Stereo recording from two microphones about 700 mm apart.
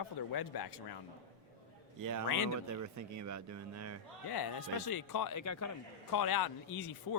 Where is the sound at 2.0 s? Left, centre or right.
Right.